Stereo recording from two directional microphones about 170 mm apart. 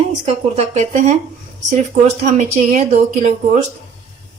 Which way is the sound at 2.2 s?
50° right (ahead or behind).